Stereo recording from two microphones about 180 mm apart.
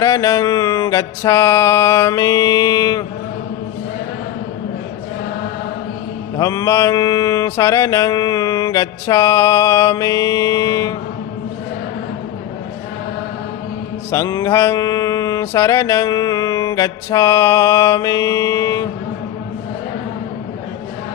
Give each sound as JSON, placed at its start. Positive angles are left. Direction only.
{"t": 0.0, "sound": "mantra", "side_deg": 20}
{"t": 6.3, "sound": "mantra", "side_deg": 20}
{"t": 14.1, "sound": "mantra", "side_deg": 15}